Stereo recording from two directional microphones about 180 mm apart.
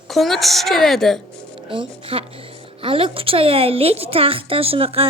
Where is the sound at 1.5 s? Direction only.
30° right (ahead or behind).